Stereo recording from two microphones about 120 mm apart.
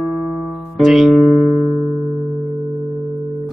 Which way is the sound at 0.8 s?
Centre (ahead or behind).